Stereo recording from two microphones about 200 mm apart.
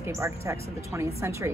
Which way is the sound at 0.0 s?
15° right (ahead or behind).